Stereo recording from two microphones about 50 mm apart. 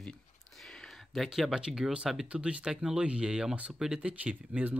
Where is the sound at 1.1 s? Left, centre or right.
Centre.